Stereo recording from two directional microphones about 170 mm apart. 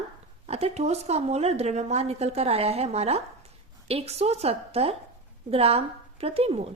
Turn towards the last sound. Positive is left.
turn(degrees=-35)  # may be behind; listen again after turning